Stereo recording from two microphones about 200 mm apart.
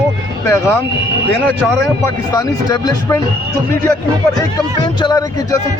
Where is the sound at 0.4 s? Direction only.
15° left (ahead or behind).